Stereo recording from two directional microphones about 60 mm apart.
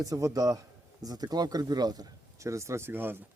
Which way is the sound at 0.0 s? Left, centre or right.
Right.